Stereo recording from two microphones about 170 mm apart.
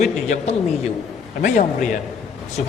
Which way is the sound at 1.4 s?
50° left (ahead or behind).